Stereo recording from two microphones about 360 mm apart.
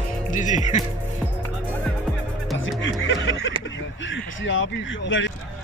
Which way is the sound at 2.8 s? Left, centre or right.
Left.